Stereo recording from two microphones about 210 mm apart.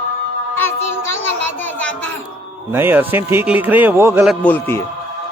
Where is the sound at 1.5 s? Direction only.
10° left (ahead or behind).